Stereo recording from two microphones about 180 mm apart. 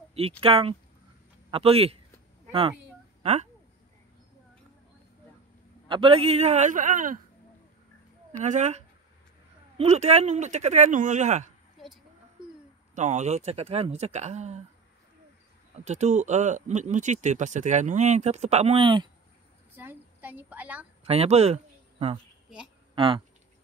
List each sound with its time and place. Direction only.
0.4 s speech: 30° right (ahead or behind)
3.2 s a sound: 40° right (ahead or behind)
5.9 s speech: 30° right (ahead or behind); by 7.2 s 45° right (ahead or behind)
8.3 s speech: 40° right (ahead or behind)
12.9 s speech: 40° right (ahead or behind)
15.8 s speech: 40° right (ahead or behind)
19.7 s a sound: 10° right (ahead or behind)
21.0 s speech: 35° right (ahead or behind)
22.9 s speech: 30° right (ahead or behind)